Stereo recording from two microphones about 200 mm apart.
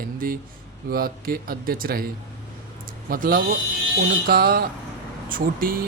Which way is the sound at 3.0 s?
45° right (ahead or behind).